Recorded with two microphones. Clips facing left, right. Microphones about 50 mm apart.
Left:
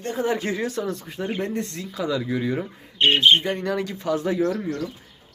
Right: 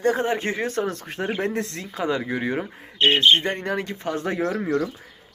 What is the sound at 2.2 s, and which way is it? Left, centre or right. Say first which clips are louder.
Speech: even; right.